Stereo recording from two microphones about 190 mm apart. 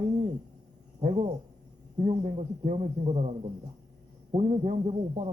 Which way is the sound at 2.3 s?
35° right (ahead or behind).